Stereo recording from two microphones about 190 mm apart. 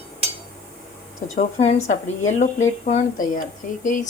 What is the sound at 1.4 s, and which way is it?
Speech, 35° left (ahead or behind).